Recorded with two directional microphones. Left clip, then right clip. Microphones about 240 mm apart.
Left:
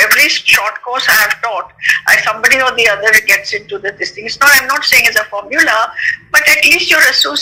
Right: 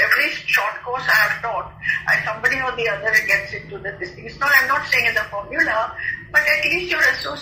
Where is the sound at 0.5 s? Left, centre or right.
Left.